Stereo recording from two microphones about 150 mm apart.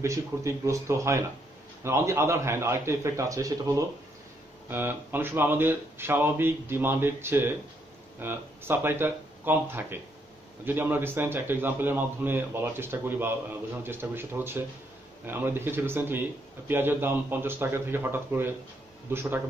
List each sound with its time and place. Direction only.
0.0 s a man's voice: 20° right (ahead or behind)